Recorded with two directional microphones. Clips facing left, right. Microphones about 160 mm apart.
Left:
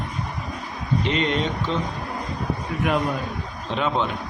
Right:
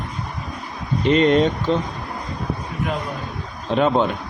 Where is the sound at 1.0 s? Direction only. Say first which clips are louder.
Right 10 dB; 45° right (ahead or behind).